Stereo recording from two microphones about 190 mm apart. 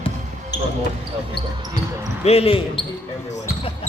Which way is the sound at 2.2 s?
35° left (ahead or behind).